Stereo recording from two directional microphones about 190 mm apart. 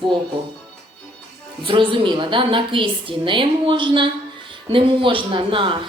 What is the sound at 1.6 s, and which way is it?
Speech, 25° right (ahead or behind).